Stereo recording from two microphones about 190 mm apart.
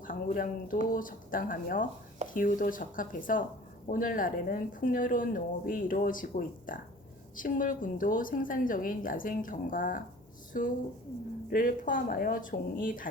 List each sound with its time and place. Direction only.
0.0 s speech: 45° left (ahead or behind)